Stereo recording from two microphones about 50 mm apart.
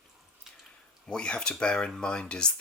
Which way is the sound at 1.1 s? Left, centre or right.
Centre.